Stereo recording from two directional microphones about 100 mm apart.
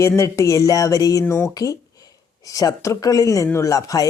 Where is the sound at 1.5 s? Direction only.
40° left (ahead or behind).